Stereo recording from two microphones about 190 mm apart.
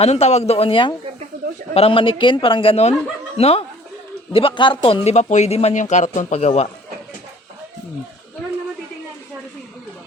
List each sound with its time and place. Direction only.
0.0 s a man's voice: 35° left (ahead or behind)